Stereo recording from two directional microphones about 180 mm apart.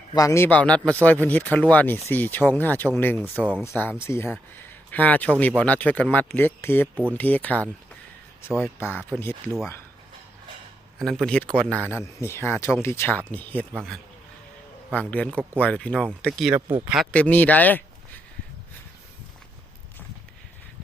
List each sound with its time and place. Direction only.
0.1 s a man's voice: 20° left (ahead or behind)
3.3 s speech: 5° right (ahead or behind)
3.6 s a man's voice: 10° left (ahead or behind)
11.0 s a man's voice: centre (ahead or behind)
15.1 s a man's voice: 5° left (ahead or behind)
16.6 s speech: 30° right (ahead or behind)
16.8 s a man's voice: centre (ahead or behind)